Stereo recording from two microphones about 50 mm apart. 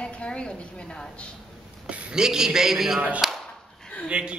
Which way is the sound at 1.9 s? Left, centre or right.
Right.